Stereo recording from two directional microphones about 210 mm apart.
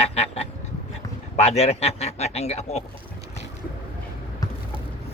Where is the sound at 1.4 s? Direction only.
30° left (ahead or behind).